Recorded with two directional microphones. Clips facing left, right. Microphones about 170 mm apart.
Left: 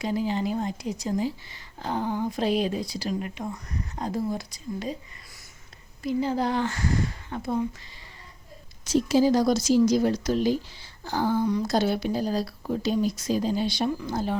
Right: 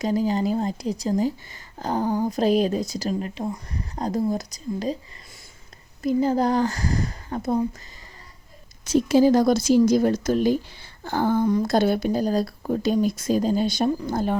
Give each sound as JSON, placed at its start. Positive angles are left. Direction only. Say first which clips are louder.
{"t": 0.0, "sound": "speech", "louder": "right 4 dB", "side_deg": -40}
{"t": 6.0, "sound": "speech", "louder": "right 5 dB", "side_deg": -45}
{"t": 8.8, "sound": "a woman's voice", "louder": "right 4 dB", "side_deg": -55}